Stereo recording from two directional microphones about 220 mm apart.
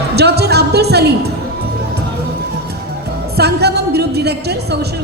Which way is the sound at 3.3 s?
45° right (ahead or behind).